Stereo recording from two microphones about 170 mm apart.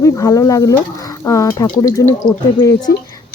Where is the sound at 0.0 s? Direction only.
20° left (ahead or behind).